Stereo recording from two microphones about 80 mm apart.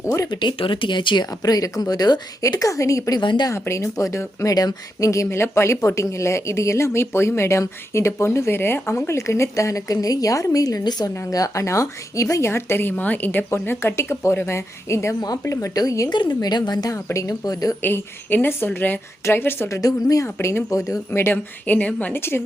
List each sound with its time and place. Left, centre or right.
0.3 s speech: left
1.4 s speech: left
2.4 s speech: left
3.2 s speech: left
3.5 s speech: left
15.2 s speech: left
16.3 s a woman's voice: left
16.9 s speech: left
17.8 s speech: left
20.2 s speech: left
21.1 s speech: left